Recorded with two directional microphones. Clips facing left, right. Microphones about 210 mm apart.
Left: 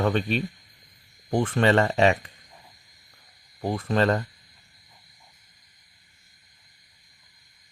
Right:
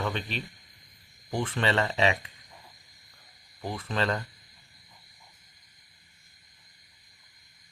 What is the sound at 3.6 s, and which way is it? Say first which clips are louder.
Speech: left 7 dB; 45° left (ahead or behind).